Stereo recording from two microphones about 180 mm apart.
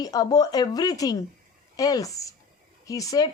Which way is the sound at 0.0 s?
20° left (ahead or behind).